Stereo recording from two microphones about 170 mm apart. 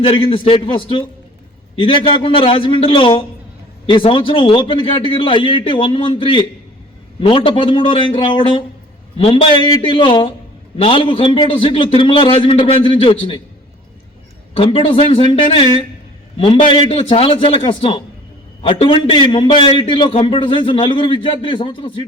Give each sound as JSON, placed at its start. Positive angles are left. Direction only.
{"t": 0.0, "sound": "a man's voice", "side_deg": 35}
{"t": 14.5, "sound": "a man's voice", "side_deg": 35}